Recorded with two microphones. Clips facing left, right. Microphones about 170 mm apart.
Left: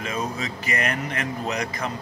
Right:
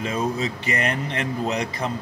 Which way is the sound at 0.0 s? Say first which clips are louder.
Right 4 dB; 30° right (ahead or behind).